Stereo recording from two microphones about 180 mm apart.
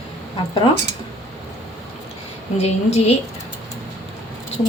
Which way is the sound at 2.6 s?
35° left (ahead or behind).